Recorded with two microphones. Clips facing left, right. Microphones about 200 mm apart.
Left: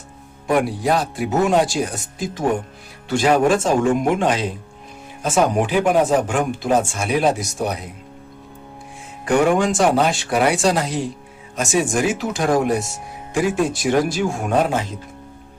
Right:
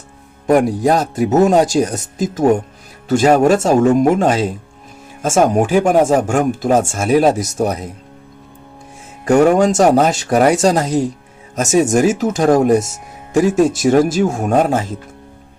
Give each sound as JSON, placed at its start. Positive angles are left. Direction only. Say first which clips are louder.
{"t": 0.4, "sound": "speech", "louder": "right 6 dB", "side_deg": -45}
{"t": 9.2, "sound": "speech", "louder": "right 6 dB", "side_deg": -40}